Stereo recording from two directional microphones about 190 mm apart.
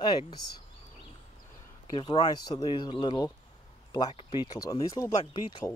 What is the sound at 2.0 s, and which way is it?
Speech, 20° left (ahead or behind).